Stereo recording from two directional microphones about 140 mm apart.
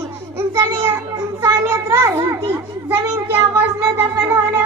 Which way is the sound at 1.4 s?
20° right (ahead or behind).